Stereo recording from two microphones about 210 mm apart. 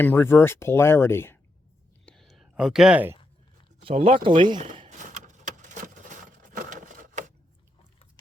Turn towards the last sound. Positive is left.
turn(degrees=-35)  # may be behind; listen again after turning